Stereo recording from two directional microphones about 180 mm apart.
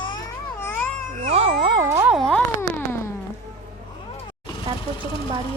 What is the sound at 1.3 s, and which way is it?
Cat, 35° right (ahead or behind).